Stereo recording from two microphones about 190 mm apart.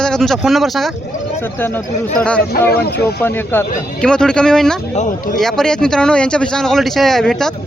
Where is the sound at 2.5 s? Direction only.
55° left (ahead or behind).